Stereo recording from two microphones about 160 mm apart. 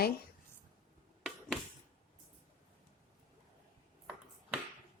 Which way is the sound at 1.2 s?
Centre (ahead or behind).